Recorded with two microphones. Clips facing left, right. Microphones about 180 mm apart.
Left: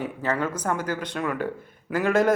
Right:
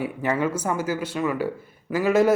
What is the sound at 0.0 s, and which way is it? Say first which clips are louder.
Speech: right 3 dB; 10° right (ahead or behind).